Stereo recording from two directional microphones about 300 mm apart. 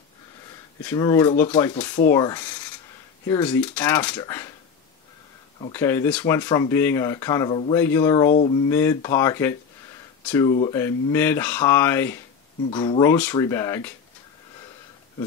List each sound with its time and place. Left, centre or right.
0.8 s speech: centre
5.7 s speech: centre
8.3 s speech: left
8.6 s speech: centre